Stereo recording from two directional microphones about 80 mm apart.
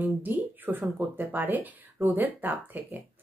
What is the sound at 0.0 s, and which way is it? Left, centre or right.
A woman's voice, right.